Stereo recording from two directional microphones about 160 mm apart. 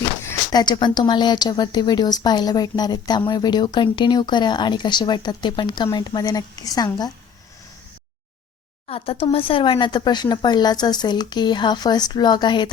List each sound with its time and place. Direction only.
0.3 s speech: 25° left (ahead or behind)
8.9 s speech: 35° left (ahead or behind)